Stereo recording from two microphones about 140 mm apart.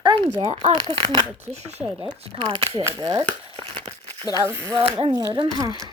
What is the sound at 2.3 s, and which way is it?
Speech, 40° right (ahead or behind).